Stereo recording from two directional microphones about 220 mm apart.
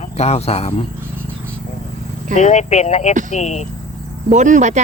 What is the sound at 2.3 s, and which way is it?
Speech, 30° left (ahead or behind).